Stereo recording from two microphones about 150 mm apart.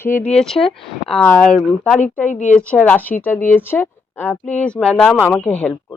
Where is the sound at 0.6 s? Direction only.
5° left (ahead or behind).